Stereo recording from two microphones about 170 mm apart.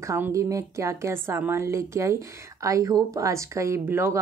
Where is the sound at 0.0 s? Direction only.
15° right (ahead or behind).